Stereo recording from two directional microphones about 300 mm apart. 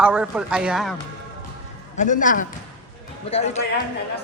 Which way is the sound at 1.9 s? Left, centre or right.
Left.